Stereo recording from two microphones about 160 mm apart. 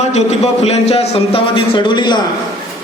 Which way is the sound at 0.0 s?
45° left (ahead or behind).